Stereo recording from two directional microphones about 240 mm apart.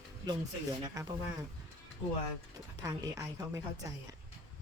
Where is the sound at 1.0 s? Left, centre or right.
Centre.